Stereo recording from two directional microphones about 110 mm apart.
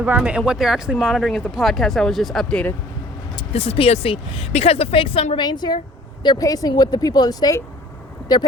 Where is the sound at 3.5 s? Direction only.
60° left (ahead or behind).